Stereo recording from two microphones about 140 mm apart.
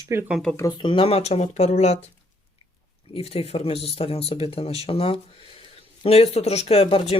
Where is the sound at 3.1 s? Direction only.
45° left (ahead or behind).